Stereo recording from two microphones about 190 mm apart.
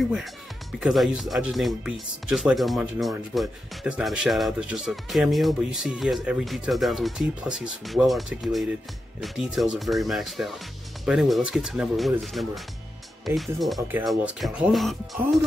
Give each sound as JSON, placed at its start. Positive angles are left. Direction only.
{"t": 0.7, "sound": "speech", "side_deg": 0}